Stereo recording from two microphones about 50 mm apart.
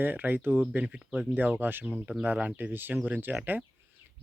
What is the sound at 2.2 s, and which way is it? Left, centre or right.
Speech, right.